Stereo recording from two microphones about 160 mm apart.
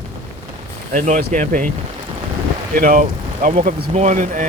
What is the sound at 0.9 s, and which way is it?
Speech, 55° right (ahead or behind).